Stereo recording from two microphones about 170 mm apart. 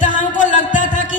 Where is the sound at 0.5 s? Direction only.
50° left (ahead or behind).